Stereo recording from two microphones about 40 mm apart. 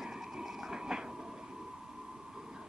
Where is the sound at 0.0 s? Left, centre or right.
Centre.